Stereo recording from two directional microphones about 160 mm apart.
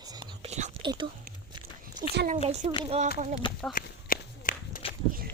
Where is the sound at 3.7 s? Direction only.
60° left (ahead or behind).